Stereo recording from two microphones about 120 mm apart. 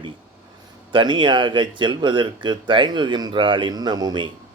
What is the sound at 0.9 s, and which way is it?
Speech, 40° right (ahead or behind).